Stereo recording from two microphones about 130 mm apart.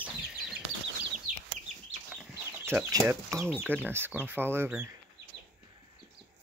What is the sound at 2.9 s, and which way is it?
Speech, 20° right (ahead or behind).